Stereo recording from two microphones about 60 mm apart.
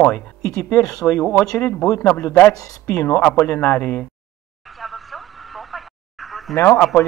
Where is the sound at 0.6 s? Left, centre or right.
Left.